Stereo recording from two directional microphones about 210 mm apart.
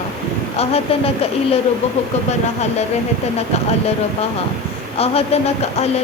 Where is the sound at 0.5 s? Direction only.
30° left (ahead or behind).